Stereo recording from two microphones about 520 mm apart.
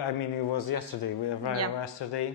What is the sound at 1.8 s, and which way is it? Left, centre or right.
Speech, left.